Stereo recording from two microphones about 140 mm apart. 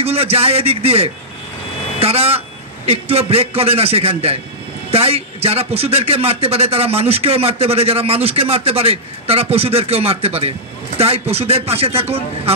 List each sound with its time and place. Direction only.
0.0 s a man's voice: 45° right (ahead or behind)